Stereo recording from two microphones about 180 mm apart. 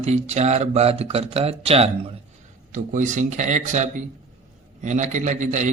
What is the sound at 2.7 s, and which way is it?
A man's voice, 45° right (ahead or behind).